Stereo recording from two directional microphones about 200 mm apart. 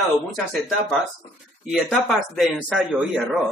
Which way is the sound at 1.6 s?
Centre (ahead or behind).